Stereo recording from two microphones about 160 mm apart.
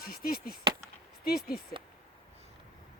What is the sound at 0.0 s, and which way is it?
Chop, 65° left (ahead or behind).